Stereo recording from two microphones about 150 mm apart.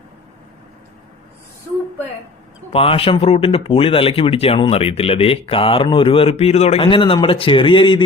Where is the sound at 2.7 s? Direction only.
40° left (ahead or behind).